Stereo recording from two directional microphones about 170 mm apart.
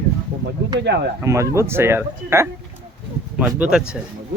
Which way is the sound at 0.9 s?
90° right.